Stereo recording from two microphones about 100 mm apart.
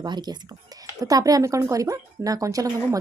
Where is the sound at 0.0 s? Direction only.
45° right (ahead or behind).